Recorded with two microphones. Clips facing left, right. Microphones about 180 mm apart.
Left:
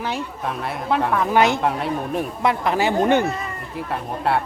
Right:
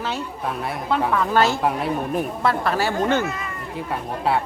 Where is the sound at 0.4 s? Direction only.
Centre (ahead or behind).